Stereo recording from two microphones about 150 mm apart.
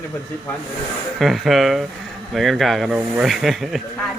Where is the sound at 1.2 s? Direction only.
Centre (ahead or behind).